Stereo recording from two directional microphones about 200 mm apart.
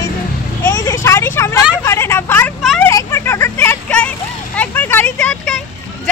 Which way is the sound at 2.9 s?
15° left (ahead or behind).